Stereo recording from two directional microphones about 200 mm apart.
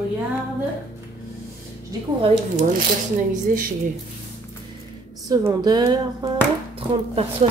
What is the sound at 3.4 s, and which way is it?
Speech, 45° right (ahead or behind).